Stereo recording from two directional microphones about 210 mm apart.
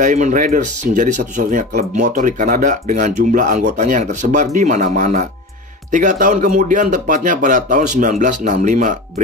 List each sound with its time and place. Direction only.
0.0 s speech: 35° right (ahead or behind)